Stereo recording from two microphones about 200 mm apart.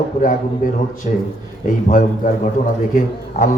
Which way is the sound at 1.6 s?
45° left (ahead or behind).